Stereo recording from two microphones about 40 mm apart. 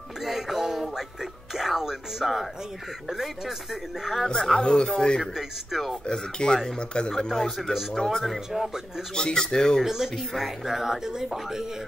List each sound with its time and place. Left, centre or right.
0.2 s music: centre
1.5 s speech: centre
4.4 s speech: centre
5.2 s speech: centre
6.0 s speech: centre
7.1 s speech: centre
8.5 s speech: centre
9.1 s speech: centre
9.8 s speech: centre